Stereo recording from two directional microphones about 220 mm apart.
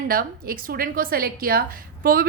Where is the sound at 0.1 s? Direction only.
40° right (ahead or behind).